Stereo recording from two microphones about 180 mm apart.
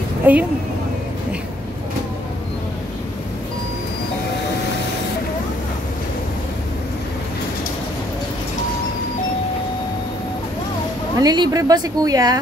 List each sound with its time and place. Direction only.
0.3 s a woman's voice: 10° right (ahead or behind)
11.1 s a woman's voice: 20° right (ahead or behind)